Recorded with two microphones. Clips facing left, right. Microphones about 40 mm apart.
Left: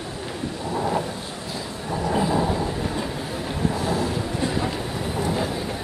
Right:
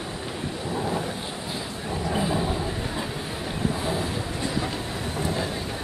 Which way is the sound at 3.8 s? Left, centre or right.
Right.